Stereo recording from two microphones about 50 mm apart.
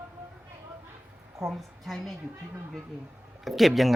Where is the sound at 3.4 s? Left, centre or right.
Centre.